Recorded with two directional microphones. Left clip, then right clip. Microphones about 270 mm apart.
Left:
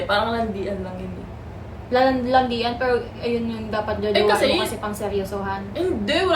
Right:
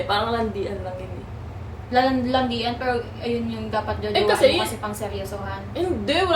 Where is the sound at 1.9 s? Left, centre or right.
Centre.